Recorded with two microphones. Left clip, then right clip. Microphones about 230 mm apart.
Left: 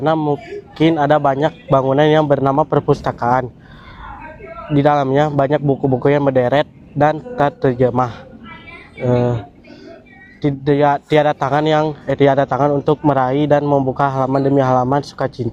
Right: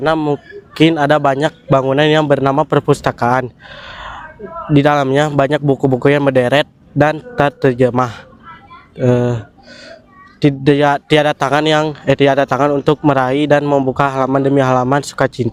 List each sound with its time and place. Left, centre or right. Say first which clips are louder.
0.0 s speech: right 2 dB; right
4.7 s speech: right 2 dB; right
10.4 s speech: right 3 dB; right